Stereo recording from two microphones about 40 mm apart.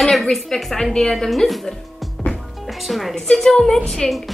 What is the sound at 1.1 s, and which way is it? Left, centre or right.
A woman's voice, centre.